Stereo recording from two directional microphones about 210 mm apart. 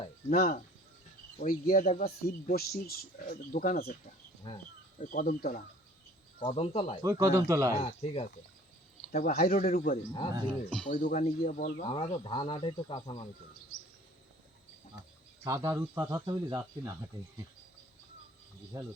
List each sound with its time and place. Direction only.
0.3 s speech: 40° left (ahead or behind)
4.4 s speech: 20° left (ahead or behind)
4.9 s speech: 40° left (ahead or behind)
6.4 s speech: 25° left (ahead or behind)
7.0 s speech: 15° right (ahead or behind)
7.8 s speech: 30° left (ahead or behind)
9.1 s speech: 40° left (ahead or behind)
11.8 s speech: 20° left (ahead or behind)
15.4 s speech: 15° right (ahead or behind)